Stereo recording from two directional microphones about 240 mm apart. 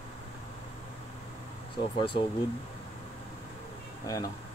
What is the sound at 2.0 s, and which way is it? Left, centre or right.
Speech, left.